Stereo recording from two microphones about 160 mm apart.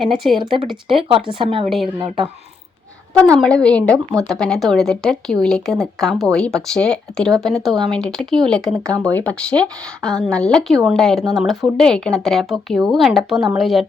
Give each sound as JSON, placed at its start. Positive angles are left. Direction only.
{"t": 0.0, "sound": "speech", "side_deg": 0}
{"t": 0.9, "sound": "speech", "side_deg": -35}
{"t": 3.3, "sound": "a woman's voice", "side_deg": 5}